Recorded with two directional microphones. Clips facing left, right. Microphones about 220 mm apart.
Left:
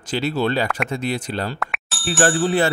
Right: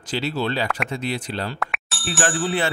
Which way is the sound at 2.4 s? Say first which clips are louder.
Left 5 dB; 40° left (ahead or behind).